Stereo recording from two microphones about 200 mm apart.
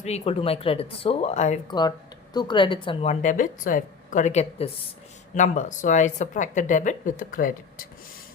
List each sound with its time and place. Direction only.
0.0 s speech: 30° left (ahead or behind)
1.6 s speech: 20° left (ahead or behind); by 7.9 s 45° left (ahead or behind)